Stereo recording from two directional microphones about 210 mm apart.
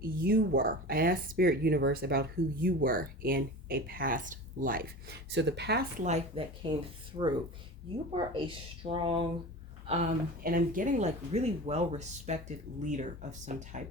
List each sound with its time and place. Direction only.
0.0 s speech: 45° right (ahead or behind)
5.3 s speech: 55° right (ahead or behind)
6.0 s speech: 30° right (ahead or behind)
8.1 s speech: 25° right (ahead or behind)